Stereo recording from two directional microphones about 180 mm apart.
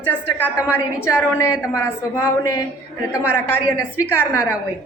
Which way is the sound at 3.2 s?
10° left (ahead or behind).